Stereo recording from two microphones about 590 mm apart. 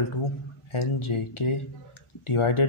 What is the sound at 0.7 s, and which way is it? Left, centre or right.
Speech, left.